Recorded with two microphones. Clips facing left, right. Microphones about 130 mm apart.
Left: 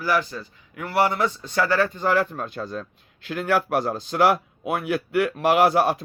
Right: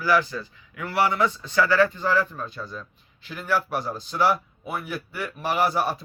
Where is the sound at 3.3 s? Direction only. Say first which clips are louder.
Left 4 dB; 70° left (ahead or behind).